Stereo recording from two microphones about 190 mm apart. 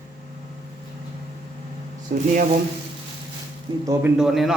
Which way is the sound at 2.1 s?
50° right (ahead or behind).